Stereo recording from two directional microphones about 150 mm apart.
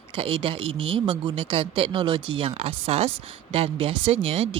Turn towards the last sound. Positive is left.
turn(degrees=-35)  # may be behind; listen again after turning